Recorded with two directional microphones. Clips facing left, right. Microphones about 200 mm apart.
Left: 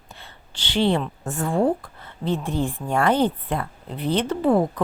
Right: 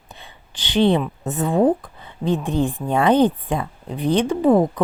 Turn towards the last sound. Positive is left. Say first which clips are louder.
# right 4 dB
turn(degrees=-15)  # may be behind; listen again after turning